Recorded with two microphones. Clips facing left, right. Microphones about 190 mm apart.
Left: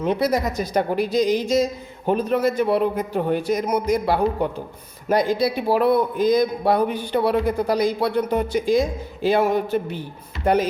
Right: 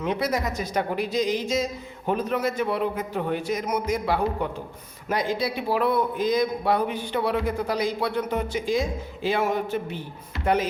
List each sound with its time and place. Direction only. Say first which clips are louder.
0.0 s a man's voice: left 5 dB; 35° left (ahead or behind)